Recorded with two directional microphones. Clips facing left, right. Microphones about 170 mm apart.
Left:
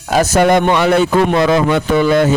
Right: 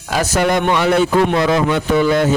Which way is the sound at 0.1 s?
45° left (ahead or behind).